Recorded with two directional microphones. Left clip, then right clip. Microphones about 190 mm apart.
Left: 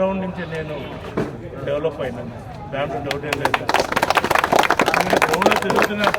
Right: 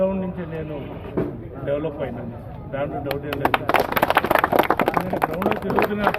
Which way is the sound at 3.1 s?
30° left (ahead or behind).